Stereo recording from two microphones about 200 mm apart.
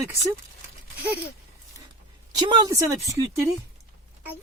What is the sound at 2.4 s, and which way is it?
Speech, 20° right (ahead or behind).